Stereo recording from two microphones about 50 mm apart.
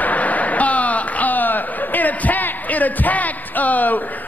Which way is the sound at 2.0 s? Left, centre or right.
Left.